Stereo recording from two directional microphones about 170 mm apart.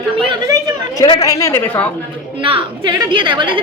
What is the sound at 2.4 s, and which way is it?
A woman's voice, 30° right (ahead or behind).